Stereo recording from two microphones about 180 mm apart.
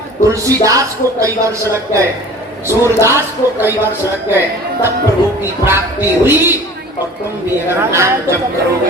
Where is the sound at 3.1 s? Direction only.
15° right (ahead or behind).